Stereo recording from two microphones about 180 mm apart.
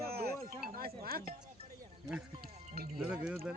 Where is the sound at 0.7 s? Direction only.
55° right (ahead or behind).